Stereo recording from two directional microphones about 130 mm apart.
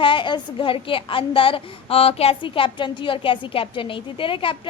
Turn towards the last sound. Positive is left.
turn(degrees=40)  # may be behind; listen again after turning